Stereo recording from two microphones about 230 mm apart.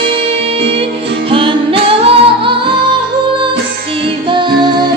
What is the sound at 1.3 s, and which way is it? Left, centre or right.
Music, right.